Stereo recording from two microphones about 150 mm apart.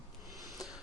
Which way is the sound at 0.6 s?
25° left (ahead or behind).